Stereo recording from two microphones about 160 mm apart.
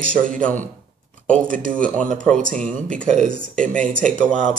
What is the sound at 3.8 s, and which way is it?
Speech, 55° right (ahead or behind).